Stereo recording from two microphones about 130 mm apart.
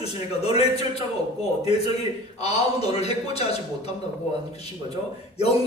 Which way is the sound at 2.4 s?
55° left (ahead or behind).